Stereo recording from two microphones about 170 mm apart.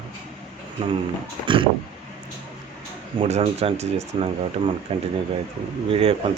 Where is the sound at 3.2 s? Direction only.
35° right (ahead or behind).